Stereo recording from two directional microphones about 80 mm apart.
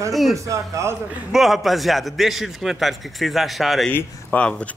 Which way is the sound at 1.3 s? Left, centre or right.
Centre.